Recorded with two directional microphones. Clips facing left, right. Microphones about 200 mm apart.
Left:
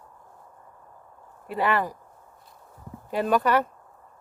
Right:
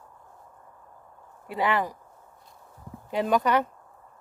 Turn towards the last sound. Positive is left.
turn(degrees=-15)  # may be behind; listen again after turning